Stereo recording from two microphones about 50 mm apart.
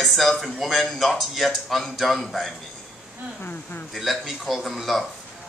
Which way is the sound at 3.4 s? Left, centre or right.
Left.